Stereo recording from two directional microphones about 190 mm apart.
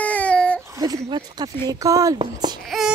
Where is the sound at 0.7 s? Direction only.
15° right (ahead or behind).